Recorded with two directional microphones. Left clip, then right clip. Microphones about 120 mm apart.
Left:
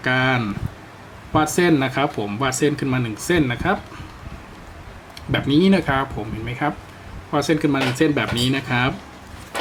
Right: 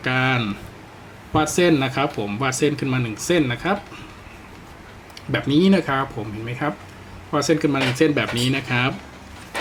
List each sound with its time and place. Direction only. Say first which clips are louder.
0.0 s speech: left 1 dB; 15° left (ahead or behind)
5.3 s speech: left 1 dB; 15° left (ahead or behind)
7.3 s speech: even; 10° left (ahead or behind)